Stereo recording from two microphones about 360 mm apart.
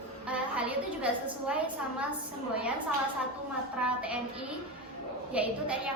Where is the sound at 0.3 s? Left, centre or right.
Centre.